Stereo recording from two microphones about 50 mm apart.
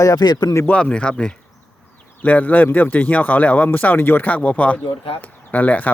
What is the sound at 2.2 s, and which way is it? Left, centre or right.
Speech, left.